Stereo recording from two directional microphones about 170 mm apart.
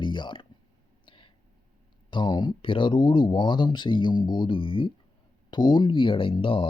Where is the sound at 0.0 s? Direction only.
25° left (ahead or behind).